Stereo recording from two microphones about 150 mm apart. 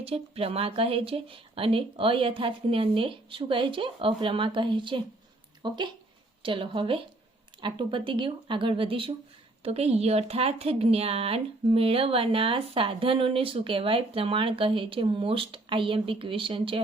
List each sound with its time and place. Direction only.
0.0 s speech: 40° right (ahead or behind)